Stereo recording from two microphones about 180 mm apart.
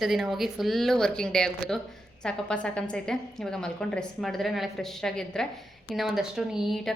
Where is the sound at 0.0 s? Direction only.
Centre (ahead or behind).